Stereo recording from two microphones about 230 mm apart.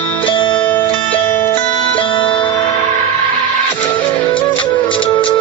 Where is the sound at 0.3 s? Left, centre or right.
Left.